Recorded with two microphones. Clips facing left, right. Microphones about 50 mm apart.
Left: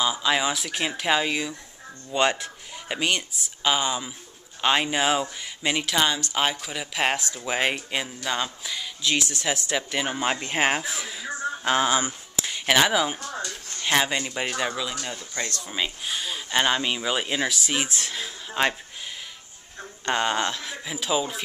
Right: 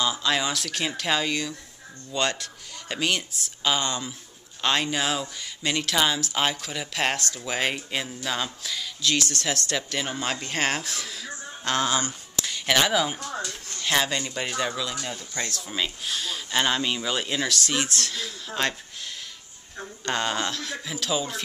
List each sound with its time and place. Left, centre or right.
0.0 s speech: centre
13.7 s speech: centre
20.1 s speech: centre